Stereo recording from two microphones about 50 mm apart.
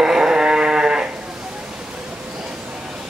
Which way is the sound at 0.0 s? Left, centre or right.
Centre.